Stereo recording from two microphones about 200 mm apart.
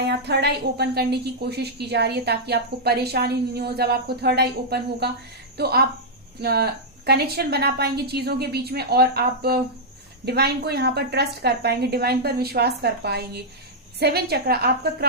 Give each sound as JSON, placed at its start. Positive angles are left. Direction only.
{"t": 0.0, "sound": "a woman's voice", "side_deg": -55}